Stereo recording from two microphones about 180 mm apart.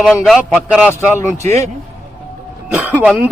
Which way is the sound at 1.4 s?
40° right (ahead or behind).